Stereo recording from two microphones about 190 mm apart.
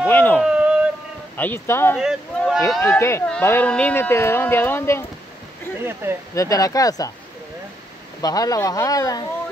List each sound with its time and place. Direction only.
0.0 s a sound: 10° left (ahead or behind)
0.4 s a sound: 5° right (ahead or behind)
1.3 s speech: 10° left (ahead or behind)
2.0 s speech: centre (ahead or behind)
2.8 s speech: 15° left (ahead or behind)
6.3 s speech: 20° left (ahead or behind)
8.2 s speech: 20° left (ahead or behind)